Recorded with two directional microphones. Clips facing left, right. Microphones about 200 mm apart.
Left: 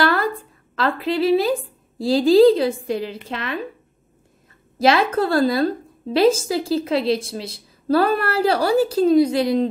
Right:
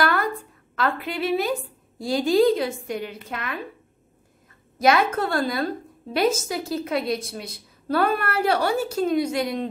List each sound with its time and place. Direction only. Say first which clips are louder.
0.0 s a sound: left 3 dB; 30° left (ahead or behind)
0.7 s a woman's voice: left 5 dB; 30° left (ahead or behind)
4.7 s a woman's voice: left 3 dB; 30° left (ahead or behind)